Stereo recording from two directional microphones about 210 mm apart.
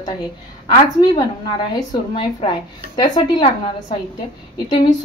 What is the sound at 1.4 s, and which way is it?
A woman's voice, 20° left (ahead or behind).